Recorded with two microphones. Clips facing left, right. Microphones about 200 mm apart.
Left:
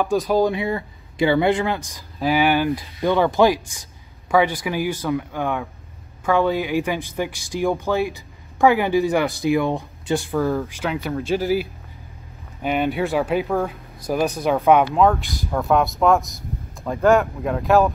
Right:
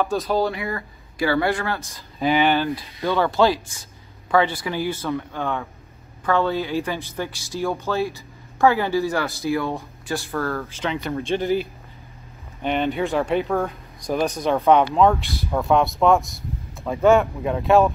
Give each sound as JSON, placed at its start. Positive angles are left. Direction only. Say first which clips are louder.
{"t": 0.0, "sound": "speech", "louder": "left 3 dB", "side_deg": 10}
{"t": 2.1, "sound": "speech", "louder": "left 1 dB", "side_deg": 0}
{"t": 10.8, "sound": "speech", "louder": "left 1 dB", "side_deg": 0}
{"t": 12.6, "sound": "speech", "louder": "left 1 dB", "side_deg": 5}